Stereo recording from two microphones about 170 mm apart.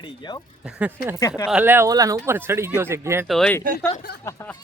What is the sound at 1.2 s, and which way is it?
Speech, 20° left (ahead or behind).